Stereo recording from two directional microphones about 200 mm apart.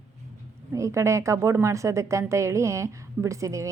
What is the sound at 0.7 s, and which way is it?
A woman's voice, 15° right (ahead or behind).